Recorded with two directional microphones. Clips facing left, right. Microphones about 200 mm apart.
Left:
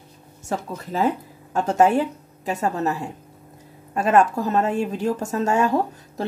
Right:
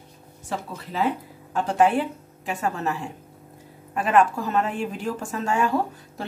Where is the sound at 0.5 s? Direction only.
45° left (ahead or behind).